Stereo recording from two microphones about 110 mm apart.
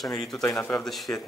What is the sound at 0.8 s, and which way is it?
Speech, centre (ahead or behind).